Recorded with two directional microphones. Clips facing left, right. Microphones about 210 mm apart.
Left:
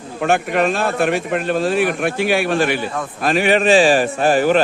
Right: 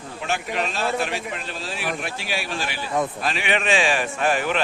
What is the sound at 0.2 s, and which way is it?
A man's voice, 55° left (ahead or behind).